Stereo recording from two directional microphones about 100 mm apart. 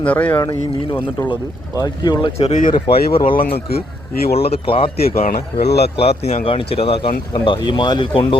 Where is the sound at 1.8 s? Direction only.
45° left (ahead or behind).